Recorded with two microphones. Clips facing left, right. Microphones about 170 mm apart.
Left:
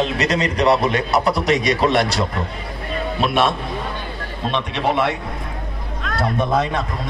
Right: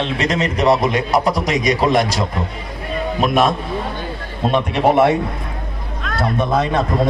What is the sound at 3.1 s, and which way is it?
Speech, 40° right (ahead or behind).